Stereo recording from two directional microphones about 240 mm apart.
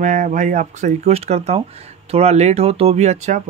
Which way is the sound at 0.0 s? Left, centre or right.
Right.